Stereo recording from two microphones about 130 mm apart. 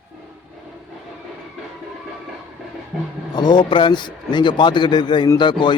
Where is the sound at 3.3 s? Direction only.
35° left (ahead or behind).